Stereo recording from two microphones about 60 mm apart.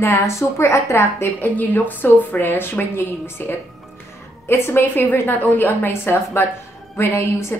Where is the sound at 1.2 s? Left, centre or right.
Left.